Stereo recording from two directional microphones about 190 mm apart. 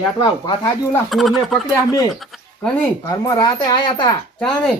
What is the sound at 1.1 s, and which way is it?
Speech, centre (ahead or behind).